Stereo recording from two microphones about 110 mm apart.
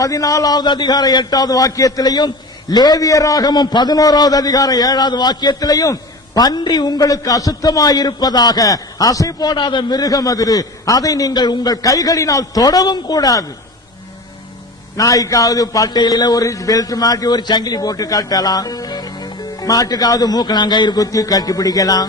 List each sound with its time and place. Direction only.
0.0 s a man's voice: 30° left (ahead or behind)
14.9 s a man's voice: 30° left (ahead or behind)